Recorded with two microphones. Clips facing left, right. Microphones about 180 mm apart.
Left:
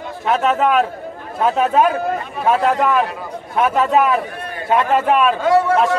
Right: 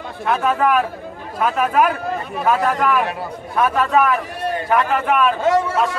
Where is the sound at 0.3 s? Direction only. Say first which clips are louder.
Left 2 dB; 20° left (ahead or behind).